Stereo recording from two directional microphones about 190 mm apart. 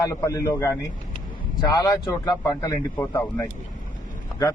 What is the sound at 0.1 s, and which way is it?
A man's voice, 15° left (ahead or behind).